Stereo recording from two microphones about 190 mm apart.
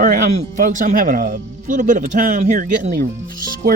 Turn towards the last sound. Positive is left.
turn(degrees=-50)  # may be behind; listen again after turning